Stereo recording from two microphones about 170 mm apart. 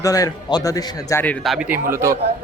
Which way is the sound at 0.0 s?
20° left (ahead or behind).